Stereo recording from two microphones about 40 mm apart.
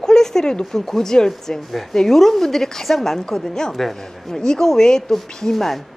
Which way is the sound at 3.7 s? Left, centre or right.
Centre.